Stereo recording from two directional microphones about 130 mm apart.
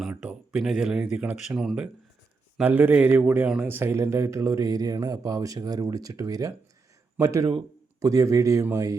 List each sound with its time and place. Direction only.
0.2 s speech: 5° right (ahead or behind); by 9.0 s 25° right (ahead or behind)